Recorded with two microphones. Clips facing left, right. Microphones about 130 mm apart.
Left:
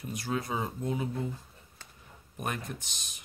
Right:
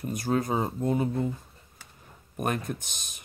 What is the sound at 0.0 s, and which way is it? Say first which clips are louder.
Speech: right 6 dB; 45° right (ahead or behind).